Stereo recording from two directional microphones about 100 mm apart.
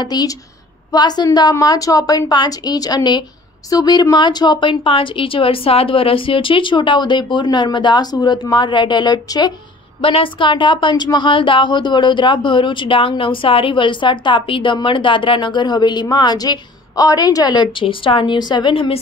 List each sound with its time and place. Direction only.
0.0 s a woman's voice: 40° left (ahead or behind)
10.0 s a woman's voice: 60° left (ahead or behind)